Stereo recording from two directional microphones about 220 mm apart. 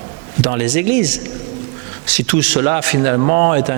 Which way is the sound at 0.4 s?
10° right (ahead or behind).